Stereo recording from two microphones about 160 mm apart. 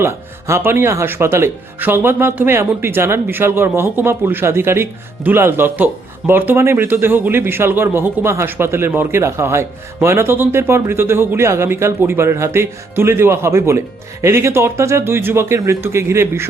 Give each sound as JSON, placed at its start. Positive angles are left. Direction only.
{"t": 0.0, "sound": "speech", "side_deg": -15}